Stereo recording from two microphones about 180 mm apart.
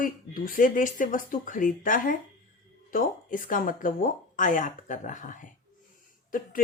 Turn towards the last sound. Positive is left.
turn(degrees=50)  # may be behind; listen again after turning